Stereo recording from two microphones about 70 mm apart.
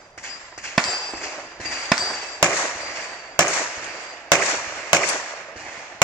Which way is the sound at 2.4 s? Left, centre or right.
Left.